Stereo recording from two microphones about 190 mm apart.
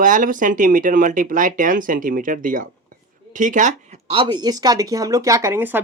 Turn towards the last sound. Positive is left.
turn(degrees=-10)  # may be behind; listen again after turning